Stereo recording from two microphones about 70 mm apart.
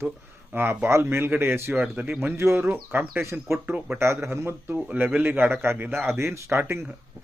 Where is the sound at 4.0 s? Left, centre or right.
Right.